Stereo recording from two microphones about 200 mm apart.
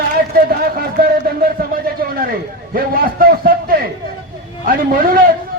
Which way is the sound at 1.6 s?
50° right (ahead or behind).